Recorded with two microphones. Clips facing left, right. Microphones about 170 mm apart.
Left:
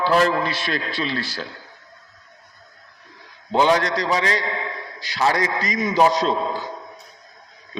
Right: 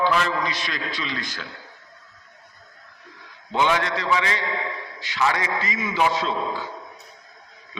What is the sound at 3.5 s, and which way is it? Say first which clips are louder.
A man's voice: left 4 dB; 35° left (ahead or behind).